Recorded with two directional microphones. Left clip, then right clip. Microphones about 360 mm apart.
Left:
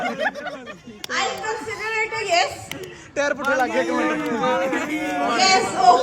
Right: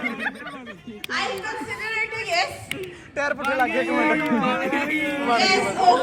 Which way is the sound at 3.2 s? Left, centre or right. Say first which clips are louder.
Left 2 dB; centre.